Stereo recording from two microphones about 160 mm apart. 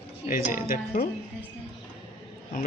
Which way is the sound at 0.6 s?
60° left (ahead or behind).